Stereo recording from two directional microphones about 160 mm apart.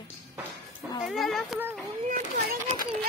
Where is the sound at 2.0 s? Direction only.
55° right (ahead or behind).